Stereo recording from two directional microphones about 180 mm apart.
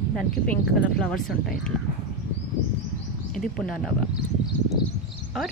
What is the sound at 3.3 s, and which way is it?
Speech, 5° left (ahead or behind).